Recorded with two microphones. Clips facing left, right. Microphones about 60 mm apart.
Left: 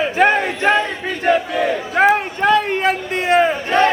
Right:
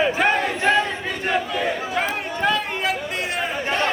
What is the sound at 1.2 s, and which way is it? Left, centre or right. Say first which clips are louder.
Crowd: left 7 dB; left.